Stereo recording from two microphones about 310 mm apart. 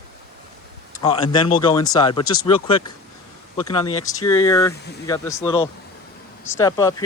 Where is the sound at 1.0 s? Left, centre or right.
Centre.